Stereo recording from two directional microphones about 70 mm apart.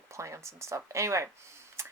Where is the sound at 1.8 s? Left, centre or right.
Right.